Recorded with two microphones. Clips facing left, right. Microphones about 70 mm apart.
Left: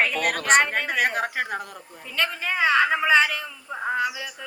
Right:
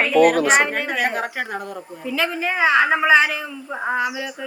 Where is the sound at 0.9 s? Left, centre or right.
Right.